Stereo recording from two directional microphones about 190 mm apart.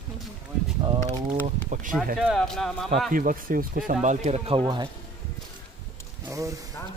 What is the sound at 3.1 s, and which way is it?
Speech, 45° right (ahead or behind).